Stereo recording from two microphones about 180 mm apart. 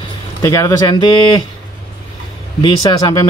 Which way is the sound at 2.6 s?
25° left (ahead or behind).